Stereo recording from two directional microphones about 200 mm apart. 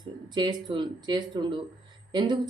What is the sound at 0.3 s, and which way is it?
A woman's voice, 25° right (ahead or behind).